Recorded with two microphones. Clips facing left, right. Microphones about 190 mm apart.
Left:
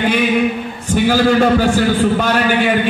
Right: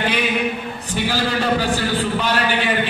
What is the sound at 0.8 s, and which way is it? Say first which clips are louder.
A man's voice: left 10 dB; 50° left (ahead or behind).